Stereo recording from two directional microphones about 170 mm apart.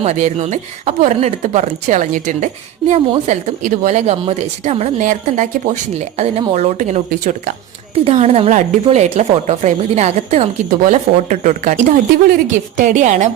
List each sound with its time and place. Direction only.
0.0 s a woman's voice: 40° right (ahead or behind)
7.9 s a woman's voice: 35° right (ahead or behind)